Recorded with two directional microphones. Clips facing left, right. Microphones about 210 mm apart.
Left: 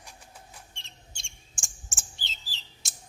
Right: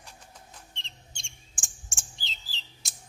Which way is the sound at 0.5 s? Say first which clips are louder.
Even; 10° left (ahead or behind).